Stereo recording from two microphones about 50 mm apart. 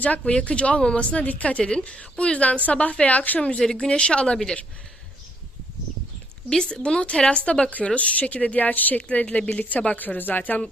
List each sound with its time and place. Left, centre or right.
0.0 s a woman's voice: left
3.6 s speech: centre
6.5 s a woman's voice: centre; by 10.6 s left